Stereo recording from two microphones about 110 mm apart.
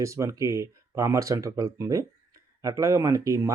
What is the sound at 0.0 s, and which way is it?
Speech, 30° right (ahead or behind).